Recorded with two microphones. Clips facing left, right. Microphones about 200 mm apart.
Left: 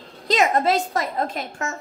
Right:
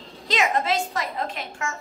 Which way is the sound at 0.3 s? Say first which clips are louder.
Left 4 dB; 40° left (ahead or behind).